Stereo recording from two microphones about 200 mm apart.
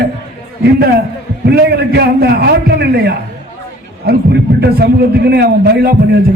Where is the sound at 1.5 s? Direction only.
55° right (ahead or behind).